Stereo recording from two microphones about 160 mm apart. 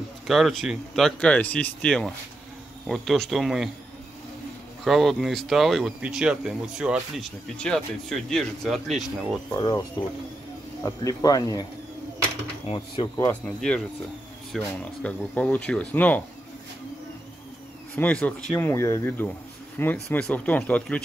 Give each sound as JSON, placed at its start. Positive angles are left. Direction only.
{"t": 0.3, "sound": "speech", "side_deg": 0}
{"t": 4.8, "sound": "speech", "side_deg": 0}
{"t": 9.6, "sound": "speech", "side_deg": 20}
{"t": 12.6, "sound": "speech", "side_deg": 35}
{"t": 13.3, "sound": "speech", "side_deg": 5}
{"t": 17.9, "sound": "speech", "side_deg": 10}